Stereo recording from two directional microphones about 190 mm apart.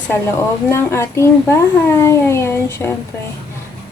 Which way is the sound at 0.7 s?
15° left (ahead or behind).